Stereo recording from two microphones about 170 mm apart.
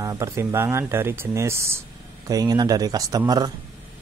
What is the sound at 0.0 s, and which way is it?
Speech, 20° right (ahead or behind).